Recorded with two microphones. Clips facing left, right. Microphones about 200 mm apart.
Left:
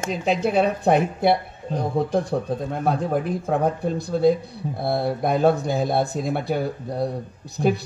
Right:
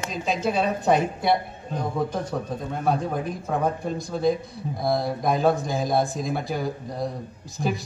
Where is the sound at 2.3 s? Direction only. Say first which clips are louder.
Left 4 dB; 45° left (ahead or behind).